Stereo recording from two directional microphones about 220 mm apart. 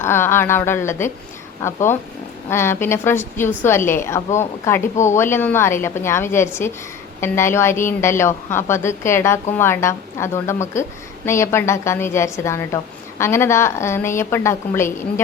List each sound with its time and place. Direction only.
0.0 s a woman's voice: 10° left (ahead or behind)